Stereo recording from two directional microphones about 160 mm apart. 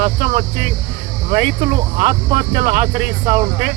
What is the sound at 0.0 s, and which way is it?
Speech, 45° right (ahead or behind).